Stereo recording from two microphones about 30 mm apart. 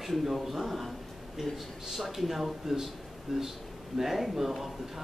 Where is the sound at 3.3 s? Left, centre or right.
Centre.